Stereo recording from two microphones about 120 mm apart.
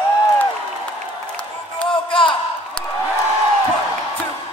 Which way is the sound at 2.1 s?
45° left (ahead or behind).